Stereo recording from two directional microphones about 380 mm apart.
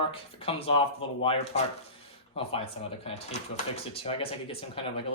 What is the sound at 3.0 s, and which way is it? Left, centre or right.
Speech, centre.